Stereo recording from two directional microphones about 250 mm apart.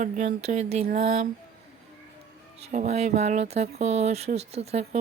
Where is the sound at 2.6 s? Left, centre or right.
Right.